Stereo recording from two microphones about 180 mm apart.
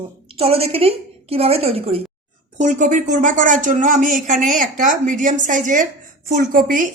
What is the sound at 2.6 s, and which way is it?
Speech, 45° right (ahead or behind).